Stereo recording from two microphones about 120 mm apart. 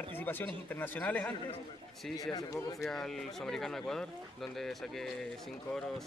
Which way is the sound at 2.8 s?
5° left (ahead or behind).